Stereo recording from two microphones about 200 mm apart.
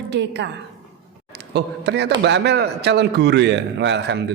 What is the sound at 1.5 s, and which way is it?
A woman's voice, 60° right (ahead or behind).